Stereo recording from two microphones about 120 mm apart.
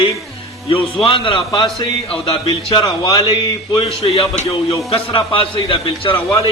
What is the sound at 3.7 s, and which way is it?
A man's voice, 45° left (ahead or behind).